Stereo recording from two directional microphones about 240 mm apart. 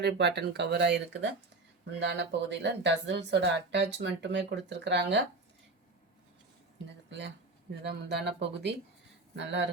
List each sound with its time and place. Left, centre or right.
0.0 s speech: right
7.1 s speech: right